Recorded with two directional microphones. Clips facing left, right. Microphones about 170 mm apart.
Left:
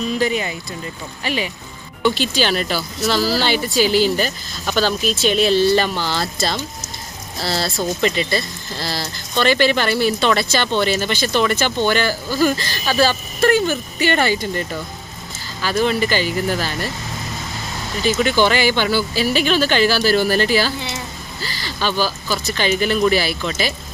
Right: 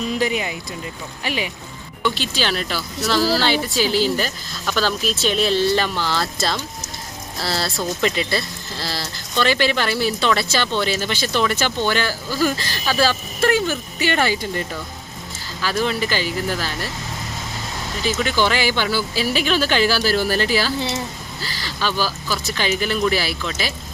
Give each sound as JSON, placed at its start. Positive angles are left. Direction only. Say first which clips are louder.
{"t": 0.2, "sound": "speech", "louder": "left 2 dB", "side_deg": -10}
{"t": 2.1, "sound": "speech", "louder": "left 4 dB", "side_deg": 0}
{"t": 4.6, "sound": "speech", "louder": "left 3 dB", "side_deg": 25}
{"t": 5.0, "sound": "speech", "louder": "left 3 dB", "side_deg": 0}
{"t": 6.0, "sound": "speech", "louder": "left 1 dB", "side_deg": 30}
{"t": 7.4, "sound": "speech", "louder": "left 2 dB", "side_deg": 0}
{"t": 15.6, "sound": "speech", "louder": "left 3 dB", "side_deg": 0}
{"t": 18.0, "sound": "speech", "louder": "left 4 dB", "side_deg": 0}